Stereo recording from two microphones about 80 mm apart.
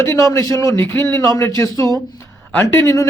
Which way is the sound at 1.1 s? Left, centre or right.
Left.